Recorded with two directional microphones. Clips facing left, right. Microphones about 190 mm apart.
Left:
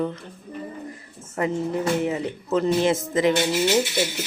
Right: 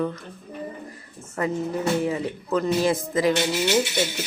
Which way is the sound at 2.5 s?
25° left (ahead or behind).